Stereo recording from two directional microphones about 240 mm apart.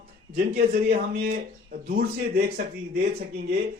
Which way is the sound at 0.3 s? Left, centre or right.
Right.